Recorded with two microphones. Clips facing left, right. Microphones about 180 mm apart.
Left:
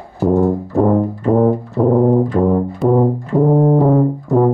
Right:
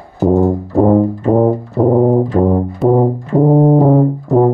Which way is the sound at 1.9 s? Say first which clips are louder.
Right 1 dB; 15° right (ahead or behind).